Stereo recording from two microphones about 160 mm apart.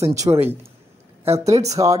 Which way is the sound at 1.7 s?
20° right (ahead or behind).